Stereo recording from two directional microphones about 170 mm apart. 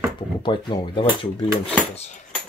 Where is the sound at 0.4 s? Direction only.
30° left (ahead or behind).